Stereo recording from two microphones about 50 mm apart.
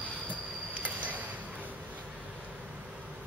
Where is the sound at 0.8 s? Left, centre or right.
Right.